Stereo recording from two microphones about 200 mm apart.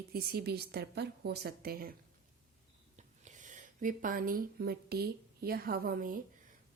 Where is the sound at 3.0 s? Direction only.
40° right (ahead or behind).